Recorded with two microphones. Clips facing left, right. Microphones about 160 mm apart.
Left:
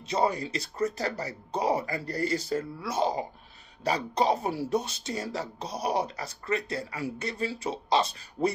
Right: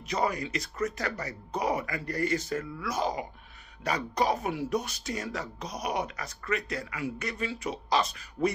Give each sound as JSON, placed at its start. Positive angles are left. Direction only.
{"t": 0.0, "sound": "speech", "side_deg": 30}